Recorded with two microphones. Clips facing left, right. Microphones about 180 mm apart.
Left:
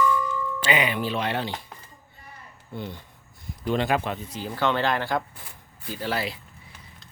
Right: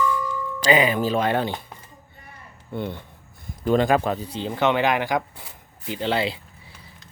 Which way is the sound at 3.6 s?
45° right (ahead or behind).